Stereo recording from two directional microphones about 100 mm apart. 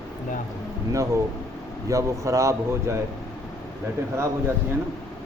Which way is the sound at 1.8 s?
30° right (ahead or behind).